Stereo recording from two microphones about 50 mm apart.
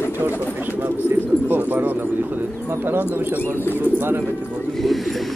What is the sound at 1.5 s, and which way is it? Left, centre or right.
Speech, right.